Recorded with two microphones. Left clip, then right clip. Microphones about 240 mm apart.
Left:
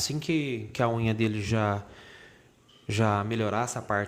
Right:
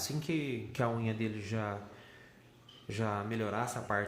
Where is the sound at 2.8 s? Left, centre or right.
Left.